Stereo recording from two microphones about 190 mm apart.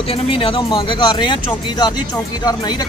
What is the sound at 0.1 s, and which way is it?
Speech, 30° left (ahead or behind).